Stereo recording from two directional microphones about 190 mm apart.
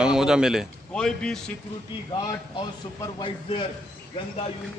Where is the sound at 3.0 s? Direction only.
25° left (ahead or behind).